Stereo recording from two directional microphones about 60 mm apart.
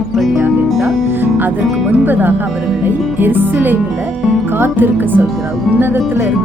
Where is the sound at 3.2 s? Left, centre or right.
Right.